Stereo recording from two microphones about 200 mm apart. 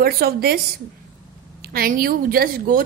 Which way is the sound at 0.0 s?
50° right (ahead or behind).